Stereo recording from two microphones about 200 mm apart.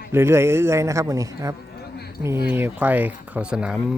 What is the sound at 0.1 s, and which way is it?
Speech, 10° right (ahead or behind).